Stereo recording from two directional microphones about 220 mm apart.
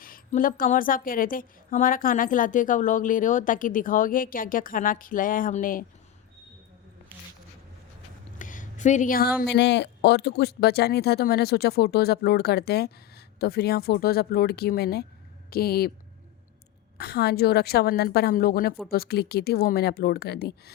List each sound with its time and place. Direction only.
0.0 s speech: 40° left (ahead or behind)
8.4 s a sound: 35° left (ahead or behind)
9.5 s speech: 50° left (ahead or behind)
17.0 s speech: 45° left (ahead or behind)